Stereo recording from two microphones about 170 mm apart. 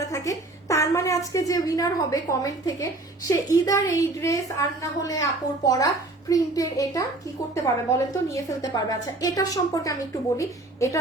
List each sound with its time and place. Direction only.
0.0 s a woman's voice: 20° left (ahead or behind)